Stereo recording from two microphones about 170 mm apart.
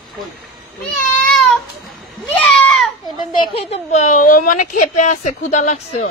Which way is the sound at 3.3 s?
35° left (ahead or behind).